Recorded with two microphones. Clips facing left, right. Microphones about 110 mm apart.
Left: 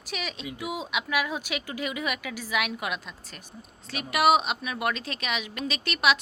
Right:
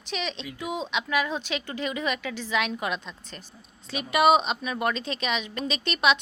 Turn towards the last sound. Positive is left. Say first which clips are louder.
# right 1 dB
turn(degrees=5)  # may be behind; listen again after turning